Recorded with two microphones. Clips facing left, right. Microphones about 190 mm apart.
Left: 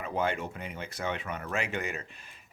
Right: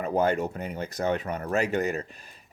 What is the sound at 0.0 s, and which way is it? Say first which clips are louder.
Speech: right 7 dB; 40° right (ahead or behind).